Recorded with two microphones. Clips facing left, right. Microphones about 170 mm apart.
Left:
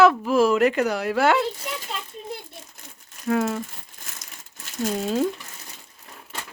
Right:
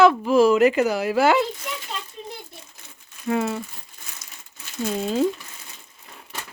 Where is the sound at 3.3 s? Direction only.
5° right (ahead or behind).